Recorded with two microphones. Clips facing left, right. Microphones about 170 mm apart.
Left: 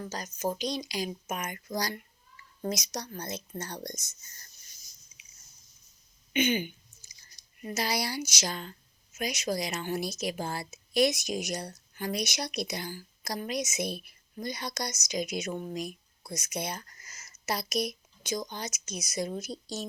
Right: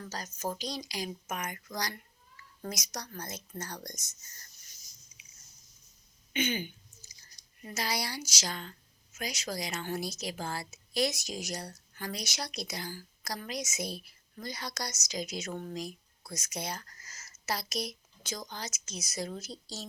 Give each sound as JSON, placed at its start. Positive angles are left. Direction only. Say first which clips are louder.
{"t": 0.0, "sound": "a woman's voice", "louder": "left 4 dB", "side_deg": 20}
{"t": 6.3, "sound": "a woman's voice", "louder": "left 5 dB", "side_deg": 20}